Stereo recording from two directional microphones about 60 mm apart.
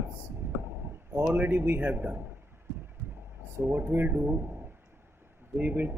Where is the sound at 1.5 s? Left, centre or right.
Right.